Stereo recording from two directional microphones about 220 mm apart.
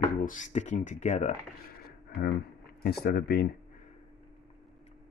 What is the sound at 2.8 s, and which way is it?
Speech, 45° left (ahead or behind).